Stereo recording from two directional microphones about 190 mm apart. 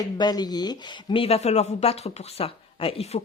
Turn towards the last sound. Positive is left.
turn(degrees=30)  # may be behind; listen again after turning